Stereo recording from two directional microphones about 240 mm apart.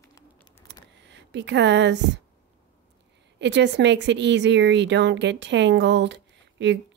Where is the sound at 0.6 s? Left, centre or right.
Right.